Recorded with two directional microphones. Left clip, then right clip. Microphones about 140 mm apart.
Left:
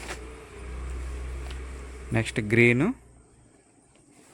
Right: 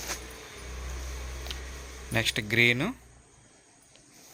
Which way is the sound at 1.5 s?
25° left (ahead or behind).